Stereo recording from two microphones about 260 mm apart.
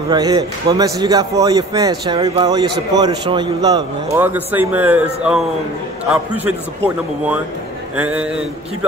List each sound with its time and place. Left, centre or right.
0.1 s a man's voice: centre
8.0 s speech: centre